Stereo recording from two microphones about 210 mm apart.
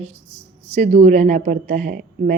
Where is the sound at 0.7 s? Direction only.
30° right (ahead or behind).